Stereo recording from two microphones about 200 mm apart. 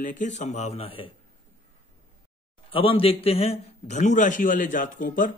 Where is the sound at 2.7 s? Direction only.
25° left (ahead or behind).